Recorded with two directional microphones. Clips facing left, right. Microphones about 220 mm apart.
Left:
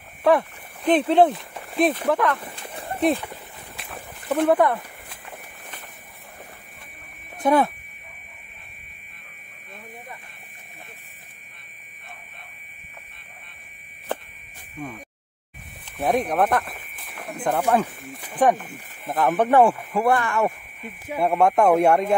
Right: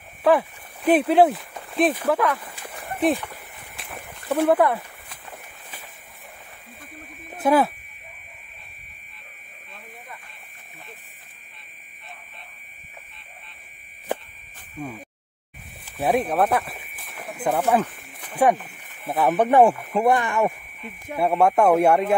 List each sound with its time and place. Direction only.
0.2 s speech: 5° right (ahead or behind)
2.6 s a sound: 25° left (ahead or behind)
3.0 s speech: centre (ahead or behind)
3.7 s a sound: 5° right (ahead or behind)
7.3 s speech: 5° right (ahead or behind)
14.8 s speech: 10° right (ahead or behind)
15.8 s a sound: 5° right (ahead or behind)
18.3 s speech: 10° right (ahead or behind)
21.4 s speech: 5° right (ahead or behind)